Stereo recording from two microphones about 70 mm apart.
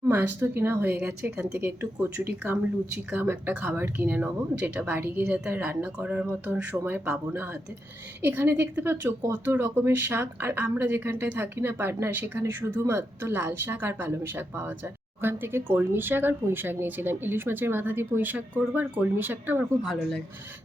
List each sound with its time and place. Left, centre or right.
0.1 s speech: right
4.9 s speech: right
8.2 s speech: right